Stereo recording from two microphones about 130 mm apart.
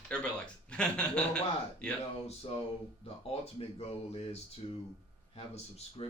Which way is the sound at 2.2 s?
50° left (ahead or behind).